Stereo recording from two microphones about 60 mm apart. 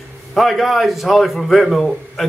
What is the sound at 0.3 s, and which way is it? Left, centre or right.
A man's voice, centre.